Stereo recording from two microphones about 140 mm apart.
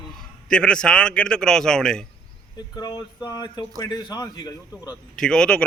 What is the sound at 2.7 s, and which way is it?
Speech, 30° left (ahead or behind).